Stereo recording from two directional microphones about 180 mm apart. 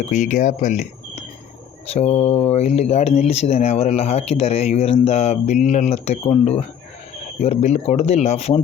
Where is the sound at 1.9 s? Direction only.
35° left (ahead or behind).